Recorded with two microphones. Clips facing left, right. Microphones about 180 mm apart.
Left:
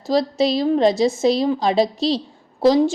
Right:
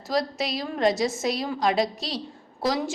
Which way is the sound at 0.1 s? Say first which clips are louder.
Left 8 dB; 30° left (ahead or behind).